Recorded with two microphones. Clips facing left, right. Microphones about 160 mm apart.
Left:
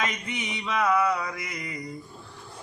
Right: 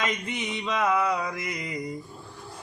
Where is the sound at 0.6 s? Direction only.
20° right (ahead or behind).